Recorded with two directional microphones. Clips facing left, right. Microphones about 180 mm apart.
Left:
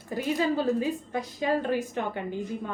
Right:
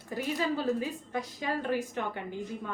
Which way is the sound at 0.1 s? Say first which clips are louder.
Left 4 dB; 25° left (ahead or behind).